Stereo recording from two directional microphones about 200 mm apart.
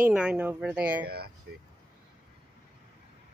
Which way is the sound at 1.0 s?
50° right (ahead or behind).